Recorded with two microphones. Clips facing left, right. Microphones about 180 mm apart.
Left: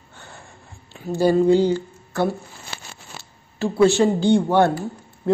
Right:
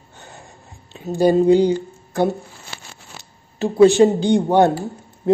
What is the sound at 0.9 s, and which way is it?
A woman's voice, 20° right (ahead or behind).